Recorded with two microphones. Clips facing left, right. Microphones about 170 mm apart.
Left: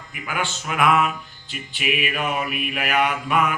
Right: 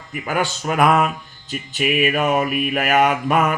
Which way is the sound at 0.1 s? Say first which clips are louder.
Right 6 dB; 40° right (ahead or behind).